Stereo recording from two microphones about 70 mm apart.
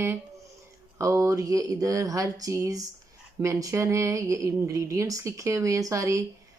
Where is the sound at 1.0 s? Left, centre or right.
Right.